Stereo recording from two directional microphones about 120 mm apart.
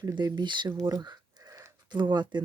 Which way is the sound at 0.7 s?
25° right (ahead or behind).